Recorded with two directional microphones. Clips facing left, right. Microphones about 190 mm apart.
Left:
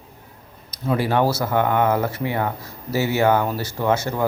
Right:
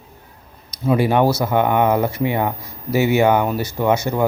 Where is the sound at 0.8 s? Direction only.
15° right (ahead or behind).